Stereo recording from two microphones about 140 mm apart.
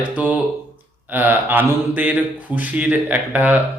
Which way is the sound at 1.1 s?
15° right (ahead or behind).